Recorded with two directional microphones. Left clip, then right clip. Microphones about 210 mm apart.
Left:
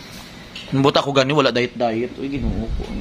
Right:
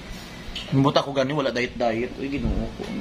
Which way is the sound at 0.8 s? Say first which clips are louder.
Left 6 dB; 35° left (ahead or behind).